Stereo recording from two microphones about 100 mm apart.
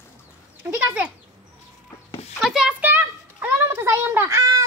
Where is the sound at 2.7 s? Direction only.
20° right (ahead or behind).